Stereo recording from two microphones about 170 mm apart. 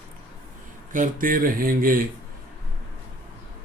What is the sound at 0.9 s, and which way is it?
Speech, 50° right (ahead or behind).